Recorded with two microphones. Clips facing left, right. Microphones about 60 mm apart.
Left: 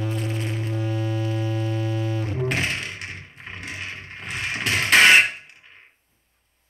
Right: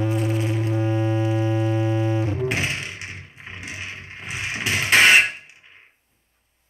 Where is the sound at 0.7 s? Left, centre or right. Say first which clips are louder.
Right 5 dB; right.